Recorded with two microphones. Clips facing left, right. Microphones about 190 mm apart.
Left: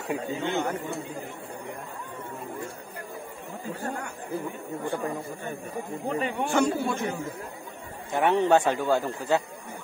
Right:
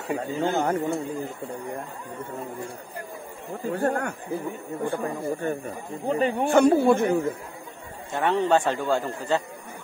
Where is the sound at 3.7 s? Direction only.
70° right (ahead or behind).